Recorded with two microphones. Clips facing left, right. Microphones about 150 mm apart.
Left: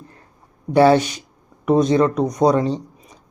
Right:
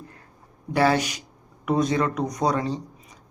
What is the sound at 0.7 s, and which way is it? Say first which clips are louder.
Speech: left 8 dB; 25° left (ahead or behind).